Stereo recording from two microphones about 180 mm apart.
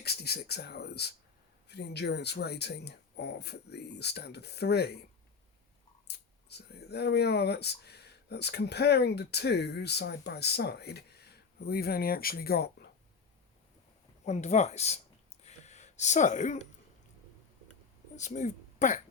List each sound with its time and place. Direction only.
0.0 s speech: 60° left (ahead or behind)
6.1 s speech: 65° left (ahead or behind)
14.3 s speech: 40° left (ahead or behind)
15.4 s a sound: 40° left (ahead or behind)
18.2 s speech: 40° left (ahead or behind)